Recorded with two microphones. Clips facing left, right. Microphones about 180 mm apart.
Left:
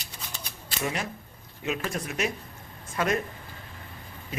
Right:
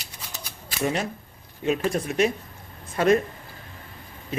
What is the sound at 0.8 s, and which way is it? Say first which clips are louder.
Speech: right 5 dB; 35° right (ahead or behind).